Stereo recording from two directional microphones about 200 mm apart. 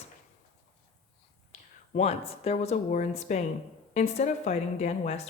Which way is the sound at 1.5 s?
35° left (ahead or behind).